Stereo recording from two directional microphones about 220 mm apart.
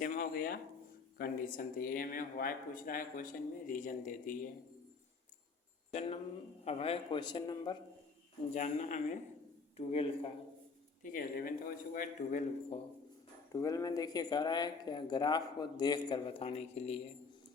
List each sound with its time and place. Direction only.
0.0 s speech: 40° left (ahead or behind)
5.9 s speech: 30° left (ahead or behind)
8.5 s speech: 35° left (ahead or behind)
11.0 s speech: 40° left (ahead or behind)
13.5 s speech: 15° left (ahead or behind)